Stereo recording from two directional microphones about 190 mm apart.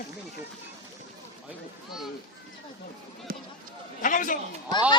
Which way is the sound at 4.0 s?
45° left (ahead or behind).